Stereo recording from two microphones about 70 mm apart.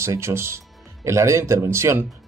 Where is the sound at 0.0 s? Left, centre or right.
Right.